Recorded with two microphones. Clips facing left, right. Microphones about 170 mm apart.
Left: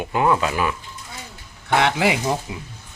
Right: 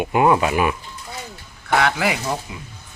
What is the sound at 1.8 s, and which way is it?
Speech, 25° left (ahead or behind).